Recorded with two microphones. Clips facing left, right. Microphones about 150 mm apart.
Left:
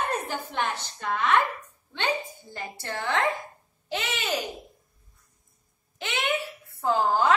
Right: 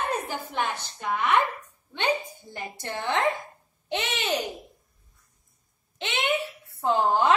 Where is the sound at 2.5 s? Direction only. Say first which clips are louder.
Even; 20° right (ahead or behind).